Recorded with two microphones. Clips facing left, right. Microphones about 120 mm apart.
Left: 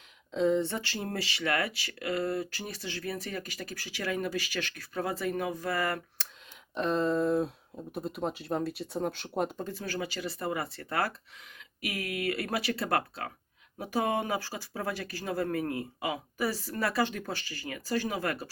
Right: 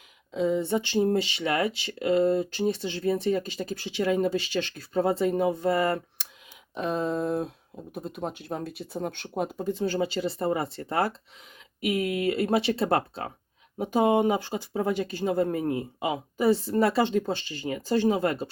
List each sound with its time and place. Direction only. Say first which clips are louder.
0.3 s speech: right 1 dB; 5° right (ahead or behind)
0.6 s speech: right 9 dB; 15° right (ahead or behind)
6.7 s speech: even; 5° right (ahead or behind)
9.6 s speech: right 9 dB; 25° right (ahead or behind)